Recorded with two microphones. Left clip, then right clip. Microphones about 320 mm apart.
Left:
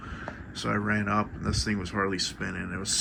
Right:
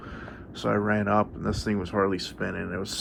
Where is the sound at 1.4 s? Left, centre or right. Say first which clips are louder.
Right 1 dB; centre.